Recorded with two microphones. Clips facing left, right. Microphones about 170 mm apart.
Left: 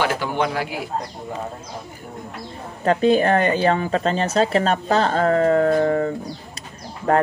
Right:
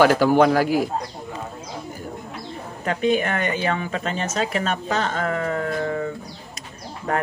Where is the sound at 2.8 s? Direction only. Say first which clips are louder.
Left 5 dB; 35° left (ahead or behind).